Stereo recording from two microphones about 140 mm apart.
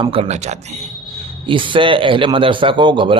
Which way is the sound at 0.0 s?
40° right (ahead or behind).